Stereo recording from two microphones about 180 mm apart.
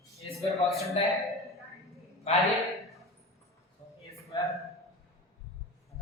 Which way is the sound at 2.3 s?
35° left (ahead or behind).